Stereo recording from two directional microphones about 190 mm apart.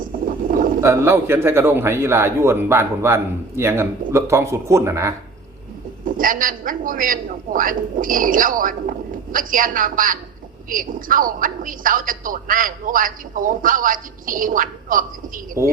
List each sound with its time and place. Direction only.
0.0 s a sound: 45° right (ahead or behind)
0.8 s a man's voice: 15° right (ahead or behind)
6.1 s a woman's voice: 45° right (ahead or behind)
15.6 s a man's voice: 15° right (ahead or behind)